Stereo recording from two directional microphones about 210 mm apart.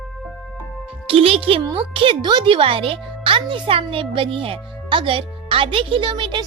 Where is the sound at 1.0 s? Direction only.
25° right (ahead or behind).